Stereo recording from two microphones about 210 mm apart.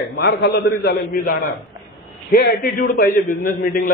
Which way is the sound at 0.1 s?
55° left (ahead or behind).